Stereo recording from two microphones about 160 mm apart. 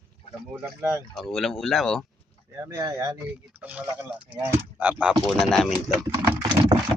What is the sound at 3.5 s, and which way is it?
Speech, 10° right (ahead or behind).